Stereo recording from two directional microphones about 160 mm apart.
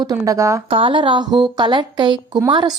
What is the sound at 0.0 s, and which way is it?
Speech, 20° right (ahead or behind).